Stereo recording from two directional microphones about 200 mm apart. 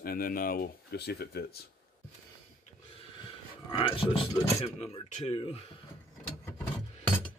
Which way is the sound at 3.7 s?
25° left (ahead or behind).